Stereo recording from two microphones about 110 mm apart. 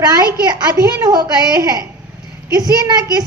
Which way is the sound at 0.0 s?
35° right (ahead or behind).